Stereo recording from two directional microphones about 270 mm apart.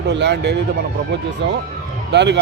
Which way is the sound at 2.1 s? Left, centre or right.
Right.